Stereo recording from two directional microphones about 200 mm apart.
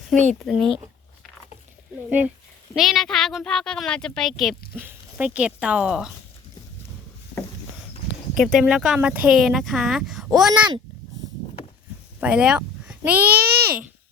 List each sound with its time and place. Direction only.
0.3 s a woman's voice: centre (ahead or behind)
2.0 s a child's voice: 10° right (ahead or behind)
8.4 s a woman's voice: centre (ahead or behind)
12.2 s a sound: 5° right (ahead or behind)
13.1 s a child's voice: 10° right (ahead or behind)